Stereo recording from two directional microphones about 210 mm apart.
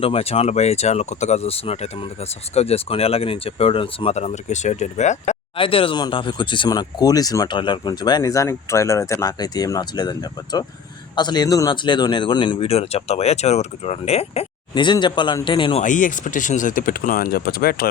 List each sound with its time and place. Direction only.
0.0 s speech: 30° left (ahead or behind)
15.8 s speech: 40° left (ahead or behind)